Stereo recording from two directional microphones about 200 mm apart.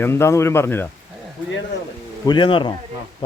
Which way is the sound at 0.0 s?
10° left (ahead or behind).